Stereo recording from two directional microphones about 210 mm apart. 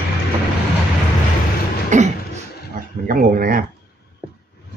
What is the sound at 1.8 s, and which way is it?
Beatboxing, 35° right (ahead or behind).